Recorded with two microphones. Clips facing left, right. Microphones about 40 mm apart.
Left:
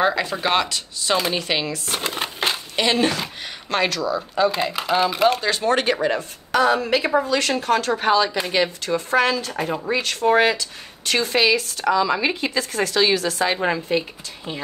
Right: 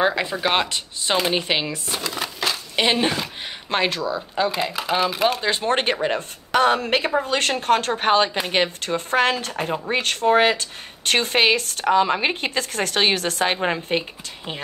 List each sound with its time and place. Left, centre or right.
0.1 s speech: right
2.0 s a sound: left
2.7 s speech: right
4.8 s speech: centre
5.4 s speech: right
6.1 s speech: right